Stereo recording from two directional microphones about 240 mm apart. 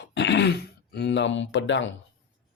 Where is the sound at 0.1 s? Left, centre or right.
Left.